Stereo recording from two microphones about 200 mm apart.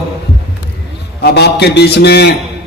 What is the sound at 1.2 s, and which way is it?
A man's voice, 55° left (ahead or behind).